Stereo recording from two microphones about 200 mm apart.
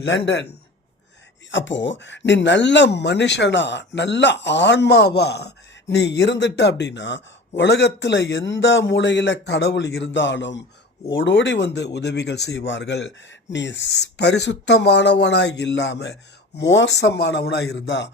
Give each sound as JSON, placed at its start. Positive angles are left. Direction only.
{"t": 0.3, "sound": "speech", "side_deg": 60}